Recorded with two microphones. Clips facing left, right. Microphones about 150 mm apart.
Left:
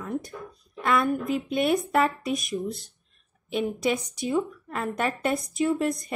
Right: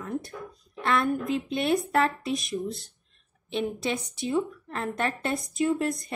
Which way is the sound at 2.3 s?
45° left (ahead or behind).